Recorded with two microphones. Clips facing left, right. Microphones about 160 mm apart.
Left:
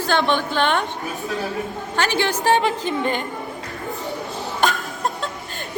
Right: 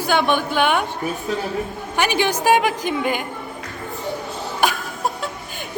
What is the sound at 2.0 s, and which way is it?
A woman's voice, 15° right (ahead or behind).